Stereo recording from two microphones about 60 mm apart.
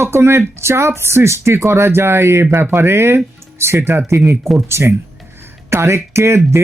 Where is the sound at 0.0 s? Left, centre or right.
Right.